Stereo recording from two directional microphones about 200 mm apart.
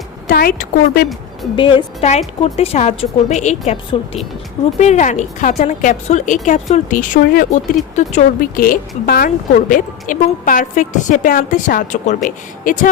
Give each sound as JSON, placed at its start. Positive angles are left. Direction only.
{"t": 0.3, "sound": "speech", "side_deg": 45}
{"t": 1.5, "sound": "a woman's voice", "side_deg": 25}